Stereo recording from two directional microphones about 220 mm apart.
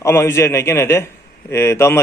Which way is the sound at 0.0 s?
10° left (ahead or behind).